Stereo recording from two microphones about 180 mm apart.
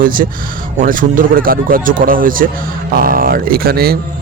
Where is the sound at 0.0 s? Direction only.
50° right (ahead or behind).